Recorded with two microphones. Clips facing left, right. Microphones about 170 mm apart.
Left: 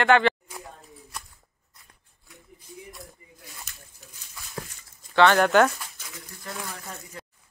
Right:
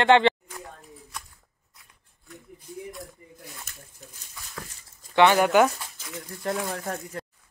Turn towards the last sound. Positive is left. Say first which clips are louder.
# right 8 dB
turn(degrees=-55)  # may be behind; listen again after turning